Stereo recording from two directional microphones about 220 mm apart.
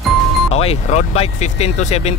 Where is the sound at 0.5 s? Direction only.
30° left (ahead or behind).